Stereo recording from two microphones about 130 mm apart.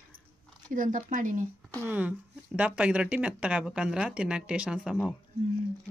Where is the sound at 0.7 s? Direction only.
85° right.